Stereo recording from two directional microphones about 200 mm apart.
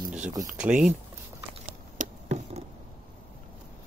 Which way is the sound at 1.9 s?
40° right (ahead or behind).